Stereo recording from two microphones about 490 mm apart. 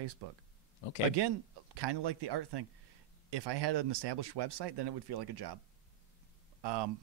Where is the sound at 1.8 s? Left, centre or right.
Right.